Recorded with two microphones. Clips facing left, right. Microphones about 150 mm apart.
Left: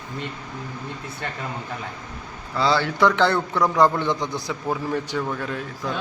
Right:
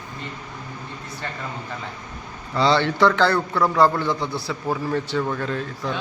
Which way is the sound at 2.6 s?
5° left (ahead or behind).